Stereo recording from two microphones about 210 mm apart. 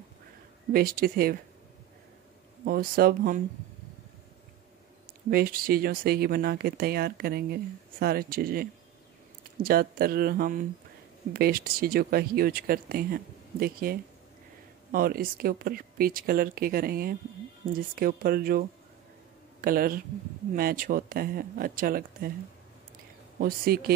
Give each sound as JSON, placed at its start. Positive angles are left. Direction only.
{"t": 0.7, "sound": "speech", "side_deg": -45}
{"t": 2.6, "sound": "speech", "side_deg": -45}
{"t": 5.3, "sound": "speech", "side_deg": -45}
{"t": 23.4, "sound": "speech", "side_deg": -45}